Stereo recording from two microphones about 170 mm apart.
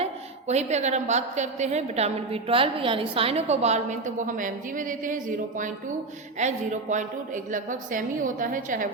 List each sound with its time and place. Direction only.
0.0 s a woman's voice: 40° right (ahead or behind)